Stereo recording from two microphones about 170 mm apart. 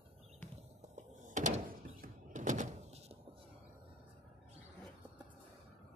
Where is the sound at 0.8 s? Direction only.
45° right (ahead or behind).